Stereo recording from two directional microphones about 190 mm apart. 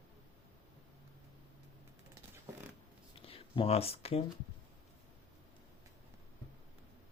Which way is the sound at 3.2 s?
30° left (ahead or behind).